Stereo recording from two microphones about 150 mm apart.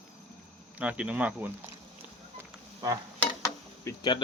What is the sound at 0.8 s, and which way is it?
Speech, 10° right (ahead or behind).